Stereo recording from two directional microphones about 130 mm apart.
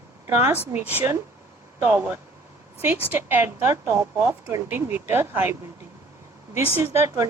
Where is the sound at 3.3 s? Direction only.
15° right (ahead or behind).